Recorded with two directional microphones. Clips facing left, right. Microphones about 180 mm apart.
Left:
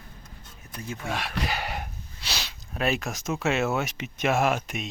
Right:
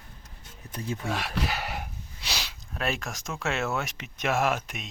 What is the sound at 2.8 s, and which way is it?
Speech, centre (ahead or behind).